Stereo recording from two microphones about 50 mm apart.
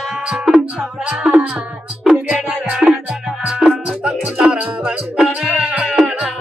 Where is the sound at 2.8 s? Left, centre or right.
Centre.